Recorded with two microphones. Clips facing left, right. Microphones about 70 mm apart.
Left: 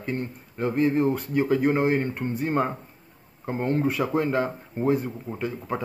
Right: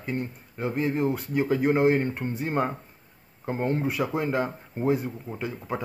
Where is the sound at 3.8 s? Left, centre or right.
Centre.